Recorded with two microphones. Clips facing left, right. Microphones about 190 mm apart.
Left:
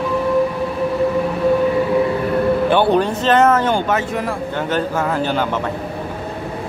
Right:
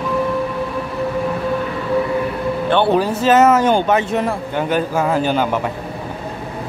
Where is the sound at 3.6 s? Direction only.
20° right (ahead or behind).